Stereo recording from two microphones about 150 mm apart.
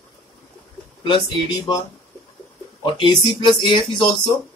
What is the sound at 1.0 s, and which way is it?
Speech, 30° left (ahead or behind).